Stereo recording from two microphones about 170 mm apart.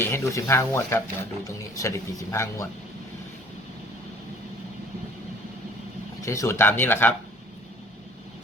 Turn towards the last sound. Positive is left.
turn(degrees=10)  # may be behind; listen again after turning